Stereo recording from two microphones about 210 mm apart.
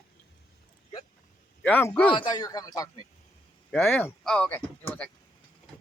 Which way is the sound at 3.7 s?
5° left (ahead or behind).